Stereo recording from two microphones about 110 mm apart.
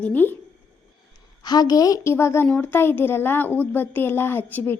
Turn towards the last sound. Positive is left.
turn(degrees=20)  # may be behind; listen again after turning